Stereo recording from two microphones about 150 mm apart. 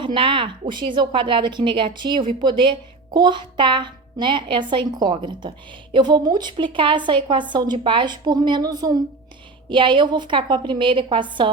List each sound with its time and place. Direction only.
0.0 s a child's voice: 35° right (ahead or behind)